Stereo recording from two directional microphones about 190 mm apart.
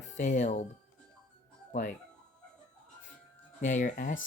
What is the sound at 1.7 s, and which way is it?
Speech, 40° left (ahead or behind).